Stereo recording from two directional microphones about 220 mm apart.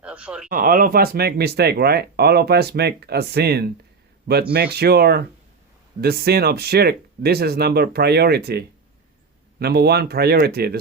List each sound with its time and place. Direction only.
0.0 s speech: 5° right (ahead or behind)
0.5 s speech: 40° right (ahead or behind)